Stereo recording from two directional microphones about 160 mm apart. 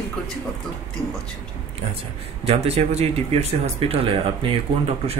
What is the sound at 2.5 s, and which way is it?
Speech, 40° right (ahead or behind).